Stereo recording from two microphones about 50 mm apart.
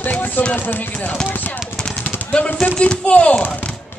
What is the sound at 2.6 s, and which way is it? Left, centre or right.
Speech, left.